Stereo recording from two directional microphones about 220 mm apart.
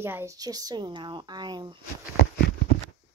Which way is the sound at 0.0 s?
10° right (ahead or behind).